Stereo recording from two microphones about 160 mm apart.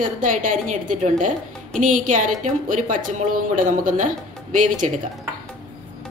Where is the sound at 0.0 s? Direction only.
55° right (ahead or behind).